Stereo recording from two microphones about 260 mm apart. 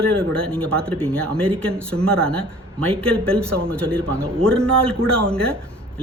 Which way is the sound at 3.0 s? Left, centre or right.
Centre.